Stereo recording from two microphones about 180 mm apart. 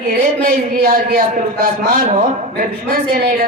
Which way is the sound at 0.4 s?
55° right (ahead or behind).